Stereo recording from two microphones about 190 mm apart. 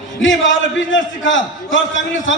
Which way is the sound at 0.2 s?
80° left.